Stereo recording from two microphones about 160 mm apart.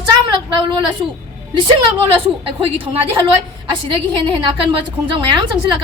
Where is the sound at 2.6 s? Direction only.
35° right (ahead or behind).